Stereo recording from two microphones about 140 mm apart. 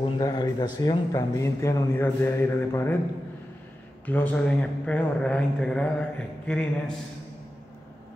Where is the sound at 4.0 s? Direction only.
10° left (ahead or behind).